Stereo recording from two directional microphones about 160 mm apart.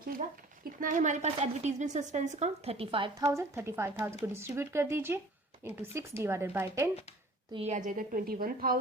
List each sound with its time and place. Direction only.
0.0 s a woman's voice: 65° right (ahead or behind); by 3.1 s 35° right (ahead or behind)
3.3 s a woman's voice: 15° right (ahead or behind)
7.5 s a woman's voice: 45° right (ahead or behind); by 8.8 s 65° right (ahead or behind)